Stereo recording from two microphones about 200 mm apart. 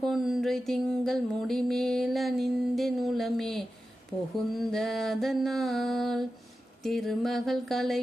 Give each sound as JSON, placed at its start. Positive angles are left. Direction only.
{"t": 0.0, "sound": "mantra", "side_deg": 0}